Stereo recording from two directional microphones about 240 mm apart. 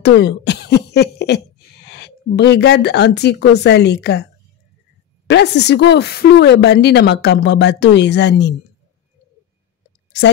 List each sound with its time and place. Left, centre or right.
0.0 s cough: left
1.9 s speech: left
5.2 s speech: left
10.1 s a woman's voice: left